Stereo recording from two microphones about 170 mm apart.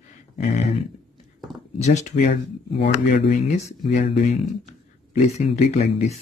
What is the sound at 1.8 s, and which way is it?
Speech, 40° left (ahead or behind).